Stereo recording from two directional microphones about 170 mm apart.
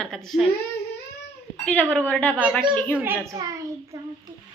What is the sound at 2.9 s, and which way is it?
Speech, 10° right (ahead or behind).